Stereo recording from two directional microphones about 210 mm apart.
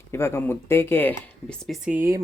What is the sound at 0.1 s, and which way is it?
Speech, 10° left (ahead or behind).